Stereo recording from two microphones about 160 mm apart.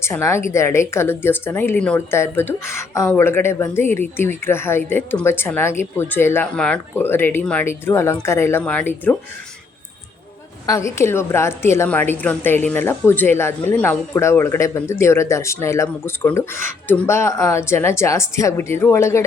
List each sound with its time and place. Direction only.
0.0 s a woman's voice: 15° left (ahead or behind)
10.7 s a woman's voice: 15° left (ahead or behind)